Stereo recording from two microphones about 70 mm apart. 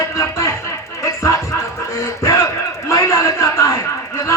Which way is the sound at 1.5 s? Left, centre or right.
Left.